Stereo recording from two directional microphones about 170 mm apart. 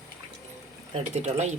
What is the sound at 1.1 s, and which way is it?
Speech, 40° right (ahead or behind).